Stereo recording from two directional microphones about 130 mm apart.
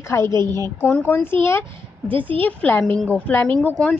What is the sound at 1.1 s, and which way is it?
A woman's voice, 15° left (ahead or behind).